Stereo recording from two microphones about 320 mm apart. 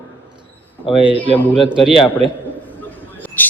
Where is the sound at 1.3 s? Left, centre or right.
Centre.